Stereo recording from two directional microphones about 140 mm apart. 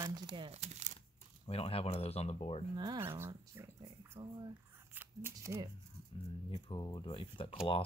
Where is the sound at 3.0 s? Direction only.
15° right (ahead or behind).